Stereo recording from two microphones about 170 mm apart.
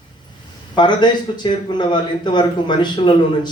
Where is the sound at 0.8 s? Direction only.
25° left (ahead or behind).